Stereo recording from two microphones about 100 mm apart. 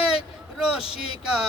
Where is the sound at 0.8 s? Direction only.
75° left (ahead or behind).